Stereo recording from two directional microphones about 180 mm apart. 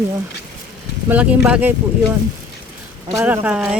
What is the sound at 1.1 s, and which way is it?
Speech, 5° right (ahead or behind).